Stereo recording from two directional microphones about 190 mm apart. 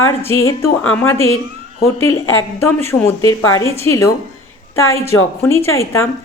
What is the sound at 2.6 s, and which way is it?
A woman's voice, 15° left (ahead or behind).